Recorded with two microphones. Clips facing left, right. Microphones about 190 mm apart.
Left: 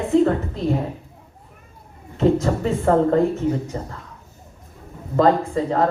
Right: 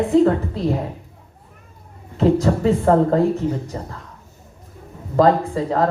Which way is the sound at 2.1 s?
35° right (ahead or behind).